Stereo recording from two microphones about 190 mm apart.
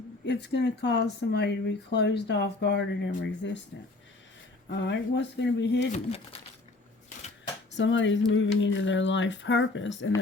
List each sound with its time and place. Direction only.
0.3 s speech: 65° left (ahead or behind)
4.7 s speech: 70° left (ahead or behind)
5.9 s speech: 30° left (ahead or behind)
7.7 s speech: 75° left (ahead or behind)